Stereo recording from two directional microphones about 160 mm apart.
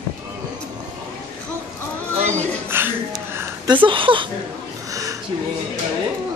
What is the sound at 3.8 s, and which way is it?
Speech, 30° right (ahead or behind).